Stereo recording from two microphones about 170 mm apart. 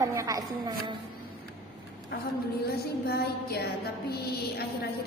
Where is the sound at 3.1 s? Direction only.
70° left (ahead or behind).